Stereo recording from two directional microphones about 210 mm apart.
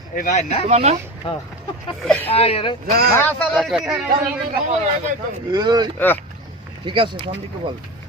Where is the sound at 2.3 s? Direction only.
30° left (ahead or behind).